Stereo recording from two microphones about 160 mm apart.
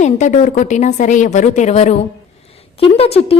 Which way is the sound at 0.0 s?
50° left (ahead or behind).